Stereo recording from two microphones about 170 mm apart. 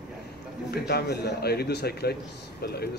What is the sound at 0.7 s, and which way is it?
A man's voice, 70° left (ahead or behind).